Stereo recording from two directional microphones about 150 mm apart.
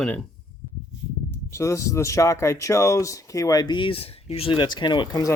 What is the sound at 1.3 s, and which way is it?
Speech, 20° left (ahead or behind).